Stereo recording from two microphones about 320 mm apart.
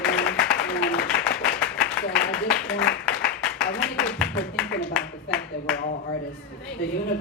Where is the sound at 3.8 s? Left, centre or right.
Centre.